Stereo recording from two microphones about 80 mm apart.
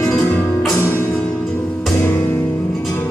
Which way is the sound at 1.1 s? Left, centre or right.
Centre.